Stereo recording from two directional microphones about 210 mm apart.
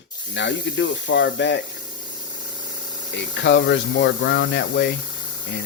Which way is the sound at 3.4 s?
60° left (ahead or behind).